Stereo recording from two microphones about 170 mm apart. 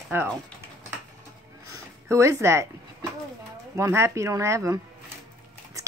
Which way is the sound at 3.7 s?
15° right (ahead or behind).